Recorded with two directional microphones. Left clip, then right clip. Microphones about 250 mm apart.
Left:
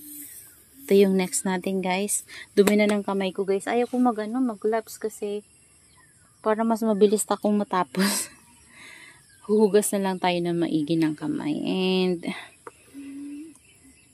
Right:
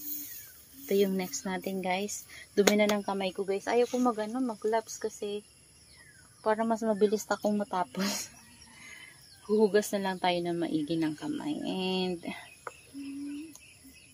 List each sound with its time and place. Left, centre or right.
0.8 s speech: left
6.4 s speech: left
9.5 s speech: left